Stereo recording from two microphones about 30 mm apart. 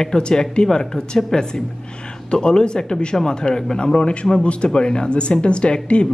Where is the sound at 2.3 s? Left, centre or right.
Left.